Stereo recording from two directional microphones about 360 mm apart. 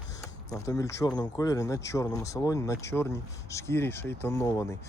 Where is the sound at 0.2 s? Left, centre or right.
Centre.